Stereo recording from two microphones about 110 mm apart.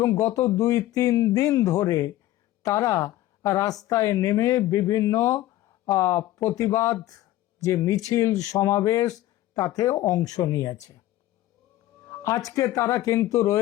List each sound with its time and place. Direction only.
0.0 s speech: 30° left (ahead or behind)
12.0 s speech: 25° left (ahead or behind)